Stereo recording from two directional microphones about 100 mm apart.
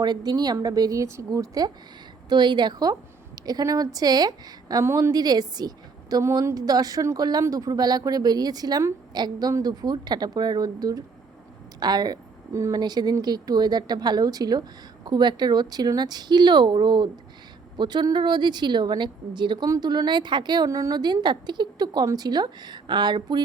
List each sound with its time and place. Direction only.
0.0 s a woman's voice: 45° right (ahead or behind)
4.8 s a woman's voice: 25° right (ahead or behind)
5.1 s a woman's voice: 40° right (ahead or behind)
19.6 s a woman's voice: 40° right (ahead or behind)
20.7 s speech: 30° right (ahead or behind)
20.9 s a woman's voice: 45° right (ahead or behind)